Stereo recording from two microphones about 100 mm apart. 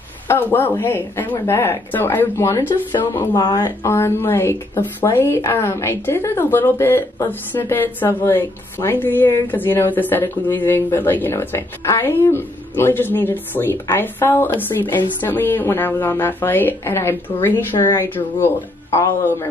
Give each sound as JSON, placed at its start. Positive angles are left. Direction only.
{"t": 0.3, "sound": "speech", "side_deg": 20}
{"t": 3.2, "sound": "speech", "side_deg": 40}